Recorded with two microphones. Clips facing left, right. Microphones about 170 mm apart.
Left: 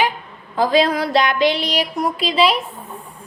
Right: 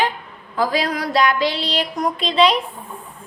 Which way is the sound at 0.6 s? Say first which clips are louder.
Left 4 dB; 25° left (ahead or behind).